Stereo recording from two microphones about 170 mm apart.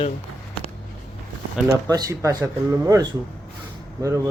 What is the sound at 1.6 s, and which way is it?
Speech, 20° right (ahead or behind).